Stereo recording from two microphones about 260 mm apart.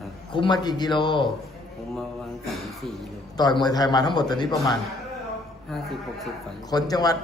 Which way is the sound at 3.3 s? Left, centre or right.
Centre.